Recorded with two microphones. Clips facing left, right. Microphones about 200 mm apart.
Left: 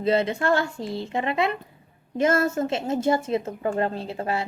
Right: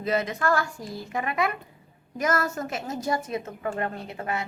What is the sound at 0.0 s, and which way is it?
Speech, 30° left (ahead or behind).